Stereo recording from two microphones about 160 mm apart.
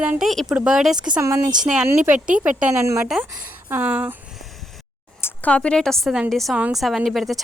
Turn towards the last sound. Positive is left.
turn(degrees=0)  # may be behind; listen again after turning